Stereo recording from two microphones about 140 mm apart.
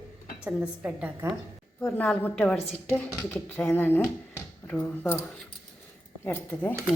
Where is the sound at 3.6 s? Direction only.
15° left (ahead or behind).